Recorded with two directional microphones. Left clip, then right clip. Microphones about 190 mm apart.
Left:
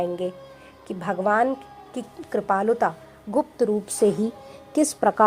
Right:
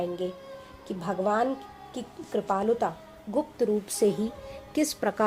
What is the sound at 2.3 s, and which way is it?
Speech, 30° left (ahead or behind).